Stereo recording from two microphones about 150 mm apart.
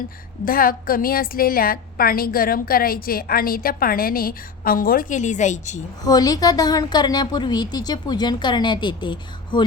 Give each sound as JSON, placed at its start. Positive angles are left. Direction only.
{"t": 0.4, "sound": "a woman's voice", "side_deg": 75}
{"t": 6.1, "sound": "a woman's voice", "side_deg": 25}